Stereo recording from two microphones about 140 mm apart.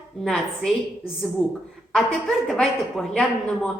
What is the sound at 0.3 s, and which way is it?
A woman's voice, centre (ahead or behind).